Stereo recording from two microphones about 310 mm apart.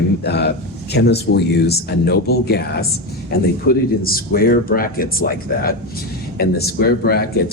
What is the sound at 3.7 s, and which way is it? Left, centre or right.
Speech, left.